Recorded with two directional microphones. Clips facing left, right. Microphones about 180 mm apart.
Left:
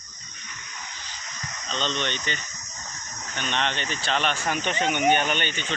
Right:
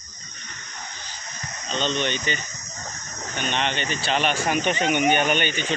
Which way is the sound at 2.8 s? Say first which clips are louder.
Right 5 dB; 55° right (ahead or behind).